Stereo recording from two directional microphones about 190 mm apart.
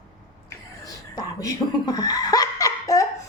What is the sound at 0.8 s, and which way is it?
Chuckle, 20° left (ahead or behind).